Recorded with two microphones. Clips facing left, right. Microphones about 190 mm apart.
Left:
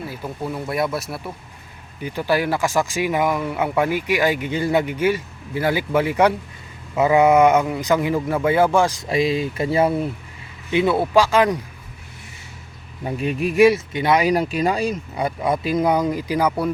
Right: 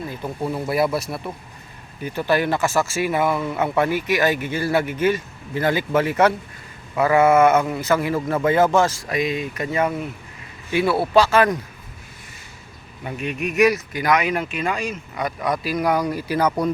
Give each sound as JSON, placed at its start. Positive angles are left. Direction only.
{"t": 0.0, "sound": "speech", "side_deg": 5}
{"t": 2.0, "sound": "speech", "side_deg": 10}
{"t": 9.0, "sound": "speech", "side_deg": 30}
{"t": 10.7, "sound": "speech", "side_deg": 20}
{"t": 13.1, "sound": "speech", "side_deg": 30}